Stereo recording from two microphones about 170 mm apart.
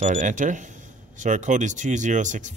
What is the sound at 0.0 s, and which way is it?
Speech, 45° right (ahead or behind).